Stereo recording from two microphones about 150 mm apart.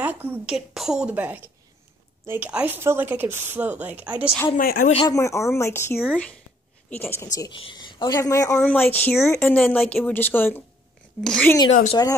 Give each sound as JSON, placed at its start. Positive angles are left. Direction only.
{"t": 0.0, "sound": "speech", "side_deg": -15}
{"t": 4.6, "sound": "speech", "side_deg": 70}
{"t": 5.0, "sound": "a woman's voice", "side_deg": 20}
{"t": 7.3, "sound": "a woman's voice", "side_deg": 30}